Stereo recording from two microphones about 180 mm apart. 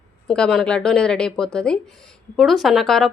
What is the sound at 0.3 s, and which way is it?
A woman's voice, 5° left (ahead or behind).